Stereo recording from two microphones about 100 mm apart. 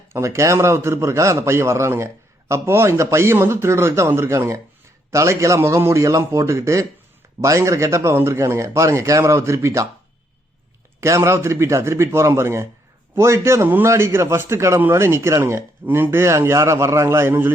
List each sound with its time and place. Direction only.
0.1 s a man's voice: 30° right (ahead or behind)
11.0 s a man's voice: 30° right (ahead or behind)